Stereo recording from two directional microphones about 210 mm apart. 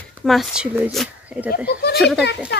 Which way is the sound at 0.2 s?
Centre (ahead or behind).